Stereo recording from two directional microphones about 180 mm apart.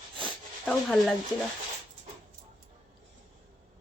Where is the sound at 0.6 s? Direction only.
Centre (ahead or behind).